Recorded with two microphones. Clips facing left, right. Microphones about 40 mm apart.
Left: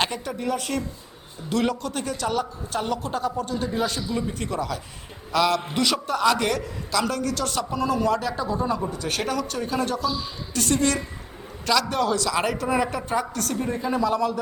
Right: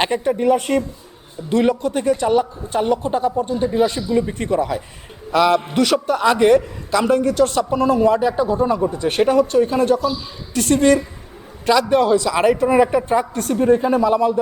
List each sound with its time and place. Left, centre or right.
0.0 s a man's voice: right